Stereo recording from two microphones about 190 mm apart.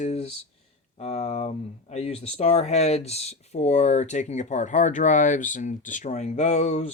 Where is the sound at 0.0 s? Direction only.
35° left (ahead or behind).